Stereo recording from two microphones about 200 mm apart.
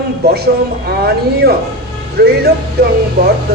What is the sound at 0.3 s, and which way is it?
A man's voice, 50° right (ahead or behind).